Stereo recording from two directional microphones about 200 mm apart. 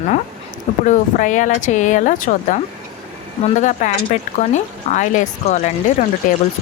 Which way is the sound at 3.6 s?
40° left (ahead or behind).